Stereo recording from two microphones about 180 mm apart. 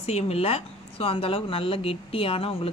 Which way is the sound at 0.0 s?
35° left (ahead or behind).